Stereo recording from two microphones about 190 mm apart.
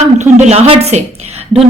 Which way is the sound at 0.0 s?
35° right (ahead or behind).